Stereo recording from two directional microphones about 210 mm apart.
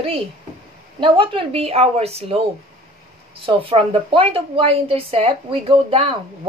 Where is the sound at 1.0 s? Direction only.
25° right (ahead or behind).